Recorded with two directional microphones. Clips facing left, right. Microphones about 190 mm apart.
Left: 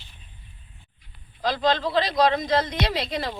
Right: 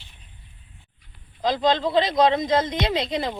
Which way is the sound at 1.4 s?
20° right (ahead or behind).